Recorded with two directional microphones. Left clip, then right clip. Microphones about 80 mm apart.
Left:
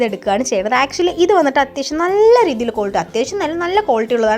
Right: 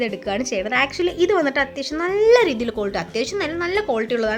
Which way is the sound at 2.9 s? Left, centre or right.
Left.